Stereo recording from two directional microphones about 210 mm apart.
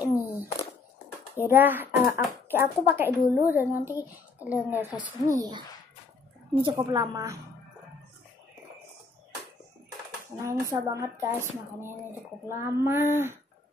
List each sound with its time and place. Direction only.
0.0 s a sound: 10° right (ahead or behind)
1.4 s speech: 10° right (ahead or behind)
5.4 s a woman's voice: 20° right (ahead or behind)
10.4 s speech: 15° right (ahead or behind)